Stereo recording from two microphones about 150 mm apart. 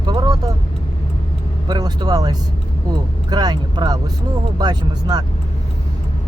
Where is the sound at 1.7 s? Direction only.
25° right (ahead or behind).